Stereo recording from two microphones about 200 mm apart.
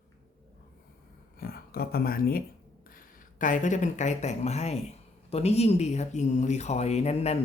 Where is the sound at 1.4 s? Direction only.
50° left (ahead or behind).